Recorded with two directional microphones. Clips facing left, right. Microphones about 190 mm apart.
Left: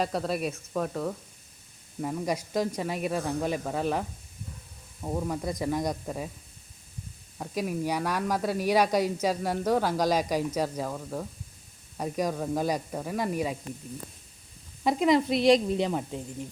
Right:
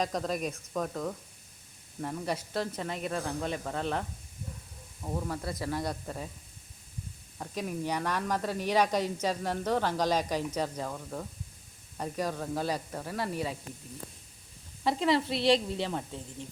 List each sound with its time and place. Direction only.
0.0 s speech: 5° left (ahead or behind)
5.0 s speech: 15° left (ahead or behind)
7.3 s speech: 10° left (ahead or behind)
14.8 s speech: 15° left (ahead or behind)